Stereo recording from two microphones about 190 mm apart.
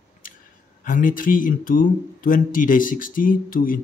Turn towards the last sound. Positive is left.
turn(degrees=45)  # may be behind; listen again after turning